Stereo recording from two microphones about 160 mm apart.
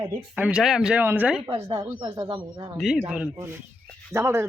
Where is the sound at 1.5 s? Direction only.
35° right (ahead or behind).